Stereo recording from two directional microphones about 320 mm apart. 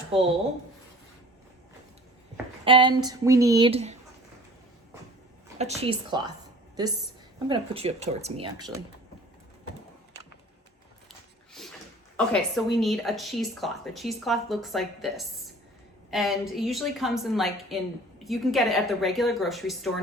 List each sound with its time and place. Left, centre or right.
0.1 s speech: centre
2.6 s speech: centre
5.5 s speech: centre
7.4 s speech: centre
11.6 s a sound: centre
12.1 s speech: centre